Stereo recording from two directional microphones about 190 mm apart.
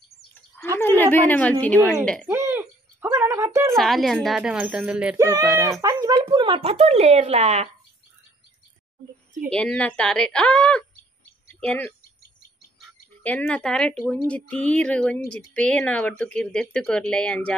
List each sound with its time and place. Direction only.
0.7 s speech: 10° left (ahead or behind)
2.2 s a sound: 10° right (ahead or behind)
3.7 s speech: centre (ahead or behind); by 7.7 s 35° right (ahead or behind)
9.5 s speech: 5° left (ahead or behind)
11.4 s a sound: 10° left (ahead or behind)
13.2 s speech: 10° left (ahead or behind)